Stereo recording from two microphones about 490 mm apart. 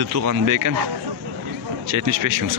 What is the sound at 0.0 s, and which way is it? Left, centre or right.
Speech, right.